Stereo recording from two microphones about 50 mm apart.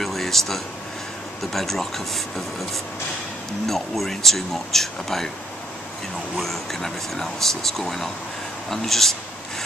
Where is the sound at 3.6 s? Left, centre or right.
Centre.